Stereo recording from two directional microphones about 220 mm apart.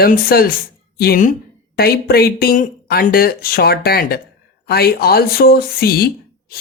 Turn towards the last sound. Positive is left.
turn(degrees=45)  # may be behind; listen again after turning